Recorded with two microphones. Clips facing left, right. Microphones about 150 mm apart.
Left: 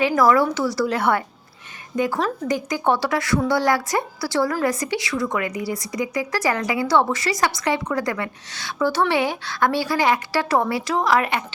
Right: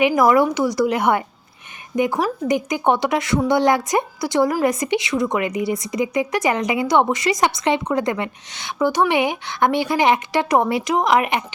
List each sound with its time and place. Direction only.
0.2 s a woman's voice: 15° right (ahead or behind)